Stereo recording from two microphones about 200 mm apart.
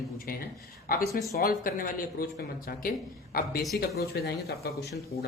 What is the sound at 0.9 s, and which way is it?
Speech, 50° left (ahead or behind).